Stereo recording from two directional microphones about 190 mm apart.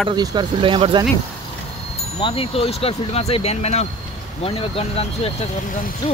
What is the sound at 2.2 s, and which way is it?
Speech, 30° left (ahead or behind).